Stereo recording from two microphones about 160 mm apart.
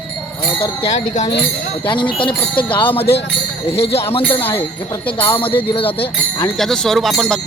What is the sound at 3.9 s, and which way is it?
Speech, 35° left (ahead or behind).